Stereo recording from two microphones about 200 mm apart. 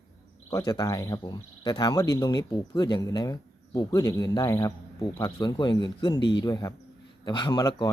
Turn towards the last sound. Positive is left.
turn(degrees=20)  # may be behind; listen again after turning